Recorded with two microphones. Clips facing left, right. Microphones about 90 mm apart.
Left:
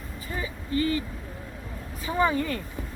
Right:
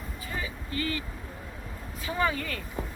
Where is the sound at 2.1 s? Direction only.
25° left (ahead or behind).